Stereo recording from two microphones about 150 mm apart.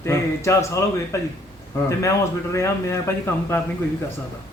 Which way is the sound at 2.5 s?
20° left (ahead or behind).